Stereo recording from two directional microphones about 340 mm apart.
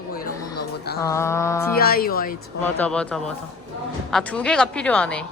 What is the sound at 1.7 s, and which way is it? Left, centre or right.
Speech, left.